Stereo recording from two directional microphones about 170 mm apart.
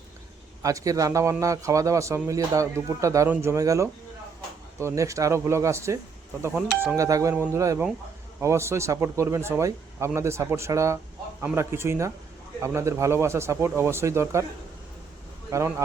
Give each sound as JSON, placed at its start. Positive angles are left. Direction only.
{"t": 0.6, "sound": "speech", "side_deg": -20}
{"t": 6.4, "sound": "speech", "side_deg": -5}
{"t": 15.4, "sound": "speech", "side_deg": -15}